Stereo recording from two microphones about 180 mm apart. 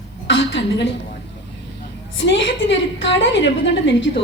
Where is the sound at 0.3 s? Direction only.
75° left (ahead or behind).